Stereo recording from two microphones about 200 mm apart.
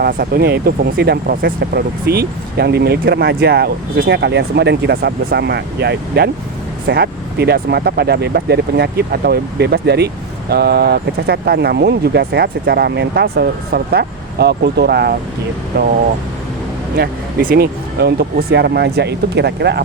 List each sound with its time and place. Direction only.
0.0 s speech: 50° right (ahead or behind)
17.0 s speech: 50° right (ahead or behind)